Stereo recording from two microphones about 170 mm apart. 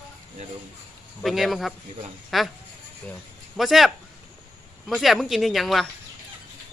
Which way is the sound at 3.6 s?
Centre (ahead or behind).